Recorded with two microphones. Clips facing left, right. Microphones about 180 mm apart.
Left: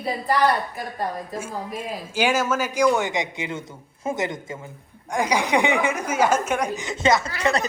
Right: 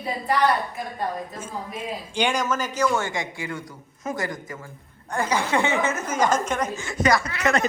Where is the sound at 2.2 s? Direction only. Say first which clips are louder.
Left 2 dB; 5° left (ahead or behind).